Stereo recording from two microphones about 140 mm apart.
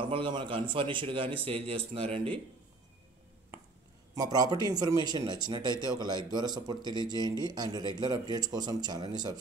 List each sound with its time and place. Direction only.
0.1 s a man's voice: 35° right (ahead or behind)
4.1 s speech: 25° right (ahead or behind)